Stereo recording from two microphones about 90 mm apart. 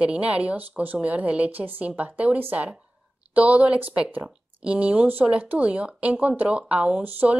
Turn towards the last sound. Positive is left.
turn(degrees=-15)  # may be behind; listen again after turning